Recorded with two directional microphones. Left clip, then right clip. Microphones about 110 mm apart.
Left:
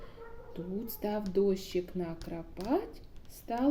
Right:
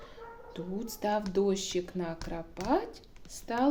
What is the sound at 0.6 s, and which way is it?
Speech, 25° left (ahead or behind).